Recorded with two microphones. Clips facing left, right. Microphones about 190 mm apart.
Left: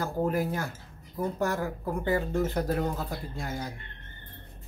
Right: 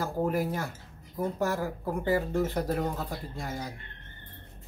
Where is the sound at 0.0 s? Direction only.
5° right (ahead or behind).